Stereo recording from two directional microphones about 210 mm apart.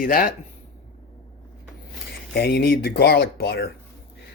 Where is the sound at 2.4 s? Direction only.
50° left (ahead or behind).